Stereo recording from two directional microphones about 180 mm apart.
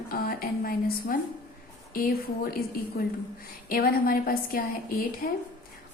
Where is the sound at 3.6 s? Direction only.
55° left (ahead or behind).